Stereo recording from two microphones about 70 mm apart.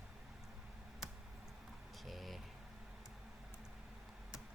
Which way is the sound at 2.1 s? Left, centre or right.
Centre.